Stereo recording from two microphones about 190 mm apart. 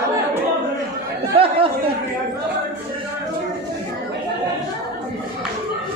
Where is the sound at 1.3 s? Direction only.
30° right (ahead or behind).